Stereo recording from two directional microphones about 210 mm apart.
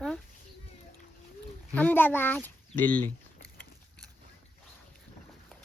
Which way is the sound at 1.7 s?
10° left (ahead or behind).